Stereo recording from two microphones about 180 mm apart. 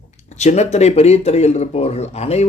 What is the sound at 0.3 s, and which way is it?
Speech, 40° left (ahead or behind).